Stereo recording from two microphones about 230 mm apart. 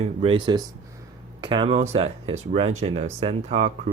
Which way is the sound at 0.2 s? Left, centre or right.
Right.